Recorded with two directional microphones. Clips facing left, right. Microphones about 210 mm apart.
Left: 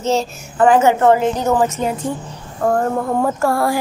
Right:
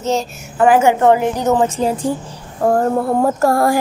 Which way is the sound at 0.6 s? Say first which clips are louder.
Even; 10° right (ahead or behind).